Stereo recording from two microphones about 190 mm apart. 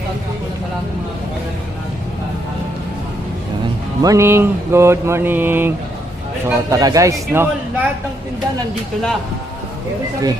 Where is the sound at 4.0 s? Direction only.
15° right (ahead or behind).